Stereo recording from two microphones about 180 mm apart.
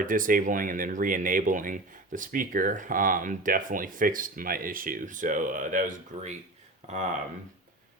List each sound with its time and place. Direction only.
0.0 s speech: 50° right (ahead or behind)